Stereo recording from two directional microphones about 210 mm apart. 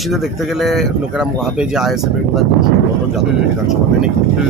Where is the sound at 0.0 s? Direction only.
Centre (ahead or behind).